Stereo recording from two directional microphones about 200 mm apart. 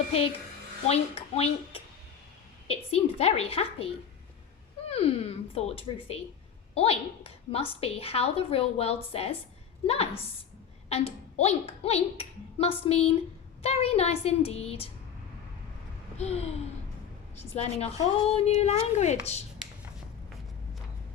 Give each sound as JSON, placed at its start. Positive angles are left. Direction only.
{"t": 0.9, "sound": "a woman's voice", "side_deg": 30}
{"t": 4.9, "sound": "a woman's voice", "side_deg": 30}
{"t": 16.1, "sound": "a woman's voice", "side_deg": 30}